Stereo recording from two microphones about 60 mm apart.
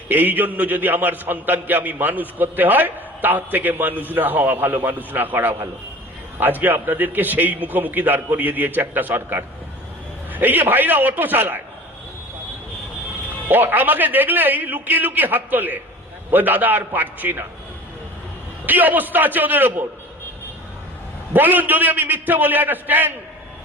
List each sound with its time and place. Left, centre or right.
0.1 s a man's voice: right
13.5 s a man's voice: right
18.6 s a man's voice: right
21.3 s a man's voice: right